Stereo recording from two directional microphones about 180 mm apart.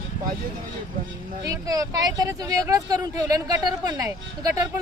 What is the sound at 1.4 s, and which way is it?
Speech, 20° right (ahead or behind).